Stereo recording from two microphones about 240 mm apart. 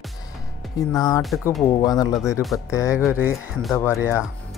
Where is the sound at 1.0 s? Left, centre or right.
Centre.